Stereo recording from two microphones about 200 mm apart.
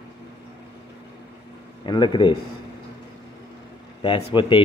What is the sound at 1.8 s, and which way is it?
Speech, 20° left (ahead or behind).